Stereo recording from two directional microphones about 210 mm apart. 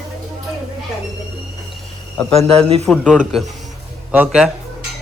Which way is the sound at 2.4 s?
30° right (ahead or behind).